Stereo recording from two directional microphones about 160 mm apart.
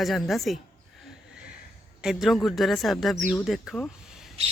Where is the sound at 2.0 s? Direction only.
Centre (ahead or behind).